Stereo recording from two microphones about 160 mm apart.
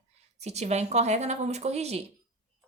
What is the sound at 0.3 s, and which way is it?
A woman's voice, 45° right (ahead or behind).